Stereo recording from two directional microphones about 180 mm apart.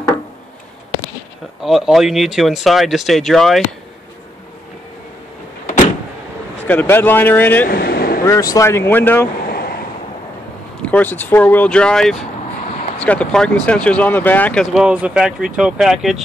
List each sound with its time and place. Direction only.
1.6 s speech: centre (ahead or behind)
6.6 s speech: 10° left (ahead or behind)
7.6 s vehicle: 60° left (ahead or behind)
8.3 s speech: 20° left (ahead or behind)
9.5 s waves: 55° left (ahead or behind)
10.8 s speech: 10° left (ahead or behind)